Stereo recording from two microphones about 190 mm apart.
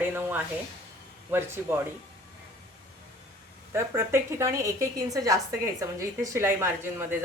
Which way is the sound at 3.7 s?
15° right (ahead or behind).